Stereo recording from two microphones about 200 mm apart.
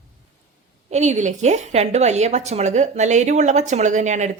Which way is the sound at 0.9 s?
35° right (ahead or behind).